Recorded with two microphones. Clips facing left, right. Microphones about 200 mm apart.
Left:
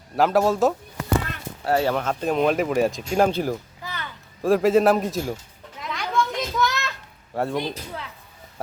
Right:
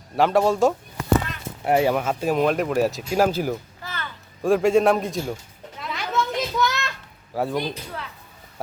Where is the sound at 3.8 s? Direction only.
15° left (ahead or behind).